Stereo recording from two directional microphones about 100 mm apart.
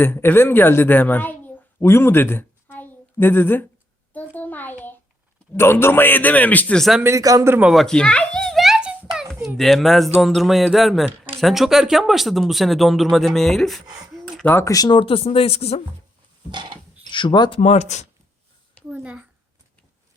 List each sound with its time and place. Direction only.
0.0 s a woman's voice: 20° left (ahead or behind)
4.1 s a sound: 15° left (ahead or behind)
5.5 s a man's voice: 25° left (ahead or behind)
6.7 s speech: centre (ahead or behind)
7.0 s speech: 30° right (ahead or behind)
7.6 s a sound: centre (ahead or behind)
9.6 s speech: centre (ahead or behind)
14.6 s speech: 35° left (ahead or behind)
14.9 s speech: 65° left (ahead or behind); by 15.8 s 85° left
16.5 s a sound: 50° right (ahead or behind)
17.1 s speech: 50° left (ahead or behind)
18.9 s speech: 10° right (ahead or behind)